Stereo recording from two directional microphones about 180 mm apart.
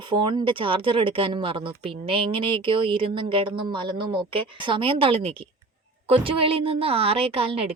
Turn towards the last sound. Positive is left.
turn(degrees=-30)  # may be behind; listen again after turning